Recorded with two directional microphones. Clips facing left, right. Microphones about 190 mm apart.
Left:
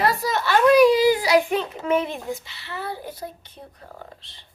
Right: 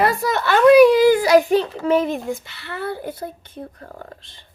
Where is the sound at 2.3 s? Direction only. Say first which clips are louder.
Right 3 dB; 55° right (ahead or behind).